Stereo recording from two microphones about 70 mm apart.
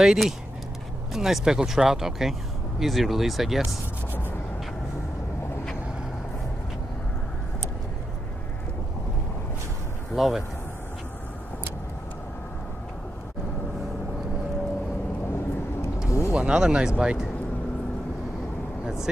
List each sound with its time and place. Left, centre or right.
0.0 s speech: centre
10.1 s speech: centre
16.1 s vehicle: left
16.3 s speech: centre